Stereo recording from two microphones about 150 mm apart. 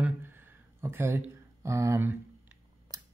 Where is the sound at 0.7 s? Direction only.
15° right (ahead or behind).